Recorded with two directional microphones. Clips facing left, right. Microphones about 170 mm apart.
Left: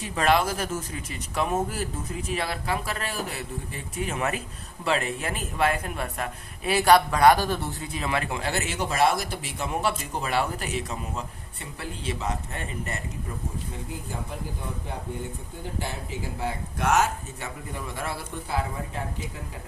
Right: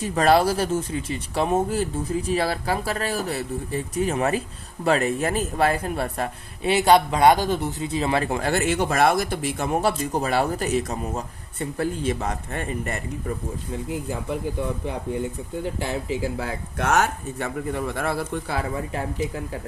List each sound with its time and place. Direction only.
0.0 s speech: 40° right (ahead or behind)
16.4 s speech: 60° right (ahead or behind)